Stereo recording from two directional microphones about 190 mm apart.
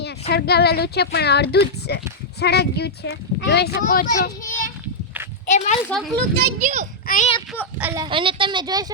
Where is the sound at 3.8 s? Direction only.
45° left (ahead or behind).